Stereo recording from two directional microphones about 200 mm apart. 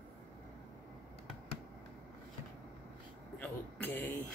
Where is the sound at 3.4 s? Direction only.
10° left (ahead or behind).